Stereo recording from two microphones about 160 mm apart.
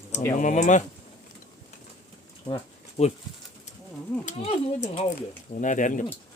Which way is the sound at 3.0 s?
45° left (ahead or behind).